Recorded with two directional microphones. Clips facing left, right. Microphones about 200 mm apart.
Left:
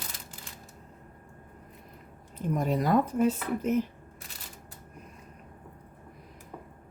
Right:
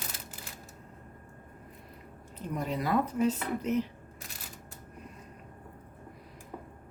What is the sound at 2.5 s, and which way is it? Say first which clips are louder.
Speech: left 4 dB; 45° left (ahead or behind).